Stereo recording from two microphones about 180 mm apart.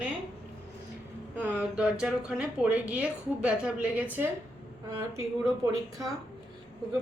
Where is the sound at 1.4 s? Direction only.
10° right (ahead or behind).